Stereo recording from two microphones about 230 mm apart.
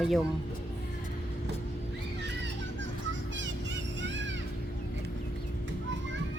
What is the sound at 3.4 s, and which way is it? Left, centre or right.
Vehicle, right.